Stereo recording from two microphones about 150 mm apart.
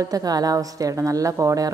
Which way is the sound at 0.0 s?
25° right (ahead or behind).